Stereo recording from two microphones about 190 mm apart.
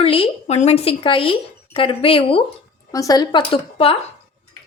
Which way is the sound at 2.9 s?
20° left (ahead or behind).